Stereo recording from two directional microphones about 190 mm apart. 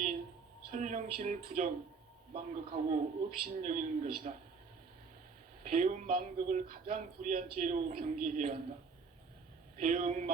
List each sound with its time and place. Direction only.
0.7 s a man's voice: 40° right (ahead or behind)
5.6 s a man's voice: 40° right (ahead or behind)
9.7 s a man's voice: 45° right (ahead or behind)